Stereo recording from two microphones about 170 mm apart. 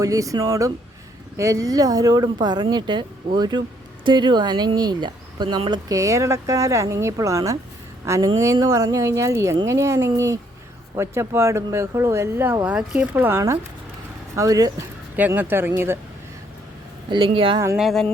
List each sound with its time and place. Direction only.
0.0 s a woman's voice: 20° right (ahead or behind)
17.1 s speech: 30° right (ahead or behind)
17.7 s speech: centre (ahead or behind)